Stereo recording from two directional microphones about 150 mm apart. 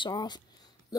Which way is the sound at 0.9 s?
25° left (ahead or behind).